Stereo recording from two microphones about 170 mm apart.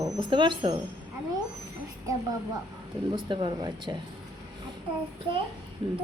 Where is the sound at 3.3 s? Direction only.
30° right (ahead or behind).